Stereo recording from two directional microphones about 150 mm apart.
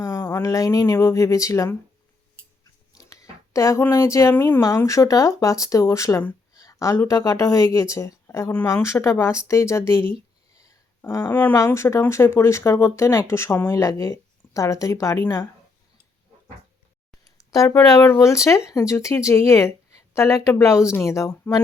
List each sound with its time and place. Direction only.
0.0 s speech: 20° left (ahead or behind)
3.0 s speech: 20° left (ahead or behind)
17.2 s speech: 25° left (ahead or behind)